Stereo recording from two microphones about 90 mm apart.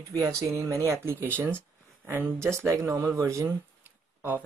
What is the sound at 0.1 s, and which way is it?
Speech, 35° right (ahead or behind).